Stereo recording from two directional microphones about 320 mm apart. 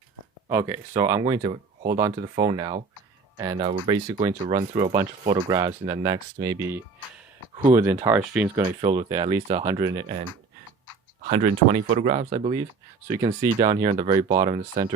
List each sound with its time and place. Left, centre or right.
0.4 s speech: centre
8.6 s speech: centre
9.8 s speech: centre
11.3 s speech: right